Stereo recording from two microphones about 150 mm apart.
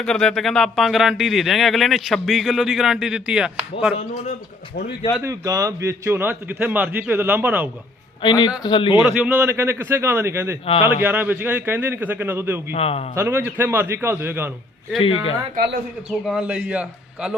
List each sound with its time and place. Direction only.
0.0 s speech: centre (ahead or behind)
5.2 s a man's voice: 20° right (ahead or behind)
8.2 s speech: 30° left (ahead or behind)
9.0 s a man's voice: 10° right (ahead or behind)
12.7 s a man's voice: 40° left (ahead or behind)
13.1 s a man's voice: 15° right (ahead or behind)
14.9 s speech: 40° left (ahead or behind)
16.0 s a man's voice: 5° right (ahead or behind)